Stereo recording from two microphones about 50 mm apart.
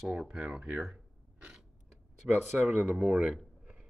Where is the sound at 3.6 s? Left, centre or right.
Right.